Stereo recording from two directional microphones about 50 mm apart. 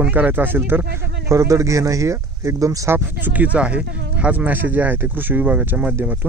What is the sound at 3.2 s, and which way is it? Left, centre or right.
Speech, right.